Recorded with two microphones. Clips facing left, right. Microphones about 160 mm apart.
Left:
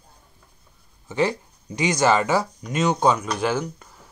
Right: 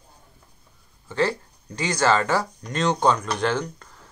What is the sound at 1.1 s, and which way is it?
Speech, 15° left (ahead or behind).